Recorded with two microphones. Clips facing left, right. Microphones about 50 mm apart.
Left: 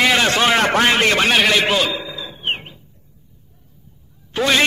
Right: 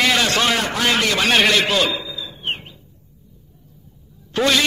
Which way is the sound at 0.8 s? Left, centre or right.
Left.